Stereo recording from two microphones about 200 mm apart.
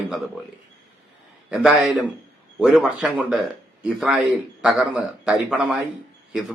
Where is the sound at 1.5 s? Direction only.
5° right (ahead or behind).